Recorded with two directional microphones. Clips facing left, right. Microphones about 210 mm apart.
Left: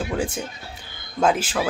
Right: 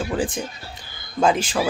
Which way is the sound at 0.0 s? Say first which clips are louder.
Right 1 dB; centre (ahead or behind).